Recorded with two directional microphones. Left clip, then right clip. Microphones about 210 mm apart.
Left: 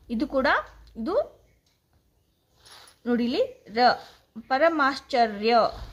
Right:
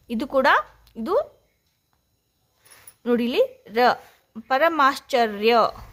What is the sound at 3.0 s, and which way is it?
Speech, 45° right (ahead or behind).